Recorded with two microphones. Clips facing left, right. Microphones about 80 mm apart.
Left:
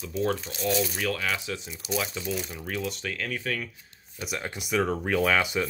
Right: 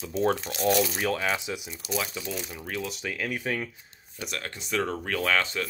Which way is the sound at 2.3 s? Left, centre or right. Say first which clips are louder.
Left 1 dB; centre.